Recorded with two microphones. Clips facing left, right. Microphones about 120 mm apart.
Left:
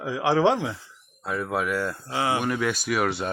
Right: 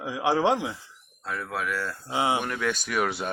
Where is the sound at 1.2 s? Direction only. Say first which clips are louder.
Left 4 dB; 15° left (ahead or behind).